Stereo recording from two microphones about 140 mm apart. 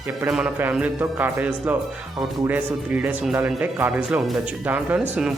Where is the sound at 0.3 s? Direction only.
5° right (ahead or behind).